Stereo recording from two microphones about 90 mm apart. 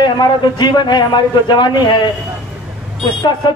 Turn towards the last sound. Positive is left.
turn(degrees=55)  # may be behind; listen again after turning